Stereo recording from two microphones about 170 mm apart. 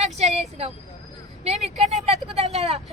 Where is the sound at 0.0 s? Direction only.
40° right (ahead or behind).